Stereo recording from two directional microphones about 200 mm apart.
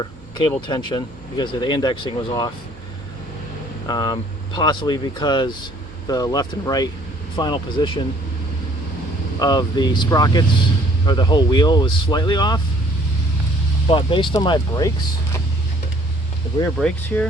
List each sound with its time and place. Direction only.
0.7 s speech: 20° left (ahead or behind)
3.8 s speech: 20° left (ahead or behind)
9.4 s speech: 20° left (ahead or behind)
13.8 s speech: 25° left (ahead or behind)
16.7 s speech: 5° left (ahead or behind)